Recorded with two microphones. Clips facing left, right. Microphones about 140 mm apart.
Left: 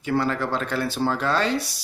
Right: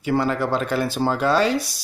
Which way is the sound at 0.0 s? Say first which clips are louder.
Right 3 dB; 15° right (ahead or behind).